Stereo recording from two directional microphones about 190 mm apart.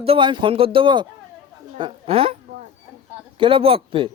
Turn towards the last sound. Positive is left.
turn(degrees=-30)  # may be behind; listen again after turning